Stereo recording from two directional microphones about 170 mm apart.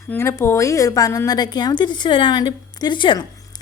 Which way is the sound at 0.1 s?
15° left (ahead or behind).